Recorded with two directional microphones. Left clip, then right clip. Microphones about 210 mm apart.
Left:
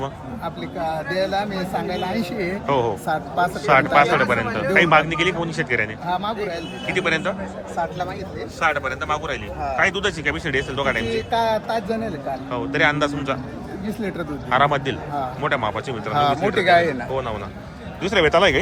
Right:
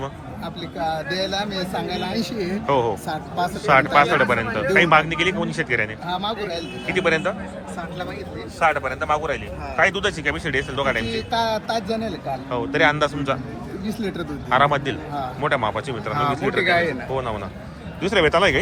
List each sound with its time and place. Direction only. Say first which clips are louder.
0.0 s speech: left 3 dB; 10° left (ahead or behind)
8.6 s speech: right 1 dB; centre (ahead or behind)
16.1 s speech: left 4 dB; 50° left (ahead or behind)
16.4 s speech: left 1 dB; 5° left (ahead or behind)
16.6 s speech: left 5 dB; 55° left (ahead or behind)
17.1 s speech: even; 5° left (ahead or behind)